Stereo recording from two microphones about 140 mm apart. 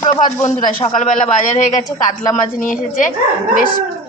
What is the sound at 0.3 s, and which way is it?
Speech, 55° left (ahead or behind).